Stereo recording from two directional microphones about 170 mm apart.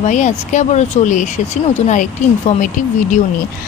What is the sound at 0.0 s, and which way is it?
Speech, 45° left (ahead or behind).